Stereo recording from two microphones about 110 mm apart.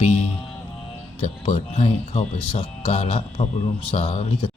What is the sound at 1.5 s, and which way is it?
Speech, 80° left.